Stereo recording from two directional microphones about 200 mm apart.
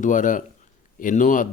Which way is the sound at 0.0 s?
40° left (ahead or behind).